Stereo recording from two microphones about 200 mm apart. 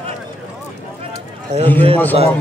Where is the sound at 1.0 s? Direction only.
35° right (ahead or behind).